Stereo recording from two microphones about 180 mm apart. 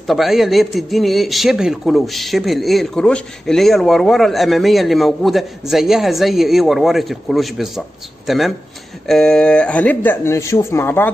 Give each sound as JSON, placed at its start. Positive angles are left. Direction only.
{"t": 0.0, "sound": "a man's voice", "side_deg": 0}